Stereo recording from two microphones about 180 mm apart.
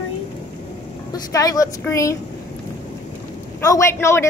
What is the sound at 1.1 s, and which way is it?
A woman's voice, 20° left (ahead or behind).